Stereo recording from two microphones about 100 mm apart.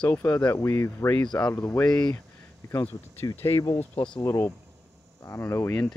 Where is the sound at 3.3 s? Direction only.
40° left (ahead or behind).